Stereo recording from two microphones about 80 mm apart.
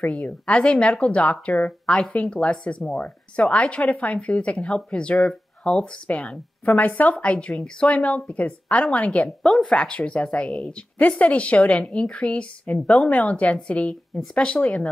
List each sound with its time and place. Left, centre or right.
0.0 s speech: centre
9.4 s speech: centre